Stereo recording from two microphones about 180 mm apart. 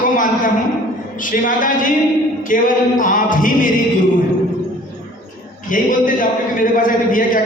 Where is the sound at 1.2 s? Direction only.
50° left (ahead or behind).